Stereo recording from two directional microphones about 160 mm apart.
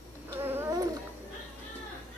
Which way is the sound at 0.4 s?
15° right (ahead or behind).